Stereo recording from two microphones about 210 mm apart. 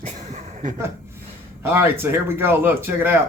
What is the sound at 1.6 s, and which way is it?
Speech, 10° right (ahead or behind).